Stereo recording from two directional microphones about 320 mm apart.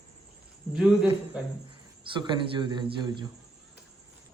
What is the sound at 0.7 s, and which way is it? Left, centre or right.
Speech, centre.